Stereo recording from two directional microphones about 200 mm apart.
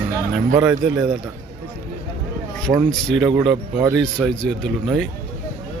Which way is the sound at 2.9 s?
5° left (ahead or behind).